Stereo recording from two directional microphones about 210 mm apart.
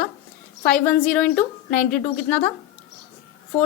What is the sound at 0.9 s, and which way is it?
Speech, 5° left (ahead or behind).